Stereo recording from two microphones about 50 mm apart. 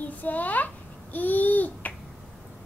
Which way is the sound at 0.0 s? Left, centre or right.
Left.